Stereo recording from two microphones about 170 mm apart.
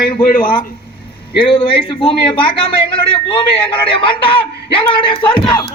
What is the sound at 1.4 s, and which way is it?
A man's voice, 30° left (ahead or behind).